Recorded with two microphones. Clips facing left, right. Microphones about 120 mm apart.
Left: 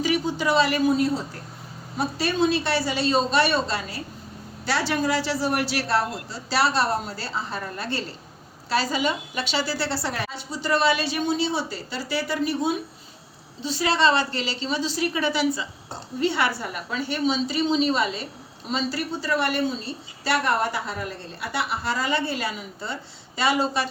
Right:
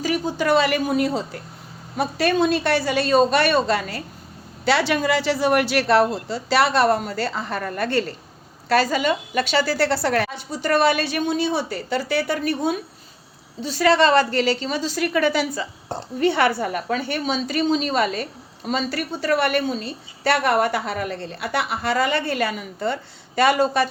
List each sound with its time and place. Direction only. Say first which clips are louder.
0.0 s speech: right 1 dB; 45° right (ahead or behind); by 1.2 s 65° right (ahead or behind)
2.0 s a woman's voice: right 3 dB; 55° right (ahead or behind)